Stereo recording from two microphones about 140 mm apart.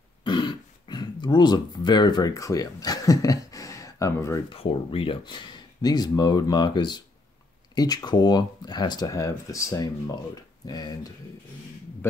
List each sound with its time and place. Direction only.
0.2 s throat clearing: 35° left (ahead or behind)
4.5 s speech: 40° left (ahead or behind)